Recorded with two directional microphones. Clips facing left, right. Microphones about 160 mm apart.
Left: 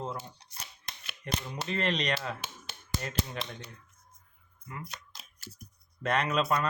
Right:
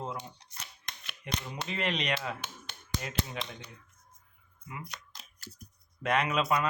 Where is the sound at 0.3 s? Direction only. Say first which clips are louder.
Left 1 dB; 35° left (ahead or behind).